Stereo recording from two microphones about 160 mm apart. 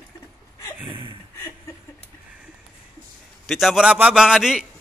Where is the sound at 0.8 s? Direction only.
30° right (ahead or behind).